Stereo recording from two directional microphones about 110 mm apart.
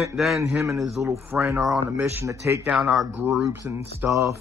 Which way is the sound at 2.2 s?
25° right (ahead or behind).